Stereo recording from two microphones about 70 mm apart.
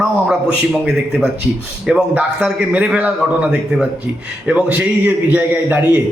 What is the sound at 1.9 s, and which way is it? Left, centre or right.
A man's voice, centre.